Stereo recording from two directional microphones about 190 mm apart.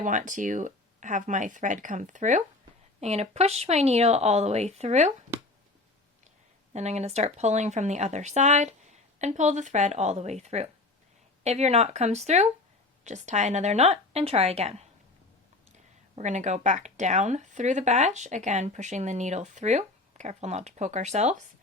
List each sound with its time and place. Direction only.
0.0 s speech: 40° right (ahead or behind)
6.7 s speech: 35° right (ahead or behind)
16.1 s speech: 40° right (ahead or behind)